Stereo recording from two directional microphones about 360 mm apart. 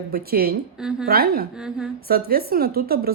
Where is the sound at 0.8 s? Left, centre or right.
Centre.